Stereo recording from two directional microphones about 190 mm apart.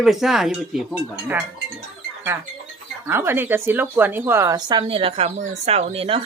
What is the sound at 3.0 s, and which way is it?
Speech, 10° right (ahead or behind).